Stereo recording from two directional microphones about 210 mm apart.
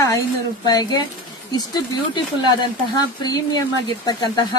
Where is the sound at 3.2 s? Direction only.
20° left (ahead or behind).